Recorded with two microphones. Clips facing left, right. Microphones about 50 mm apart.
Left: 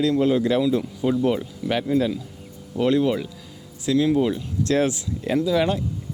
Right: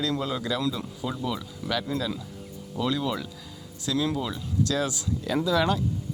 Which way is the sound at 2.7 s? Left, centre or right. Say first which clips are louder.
Left 8 dB; left.